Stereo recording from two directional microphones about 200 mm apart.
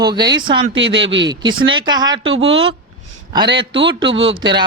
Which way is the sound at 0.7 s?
65° right (ahead or behind).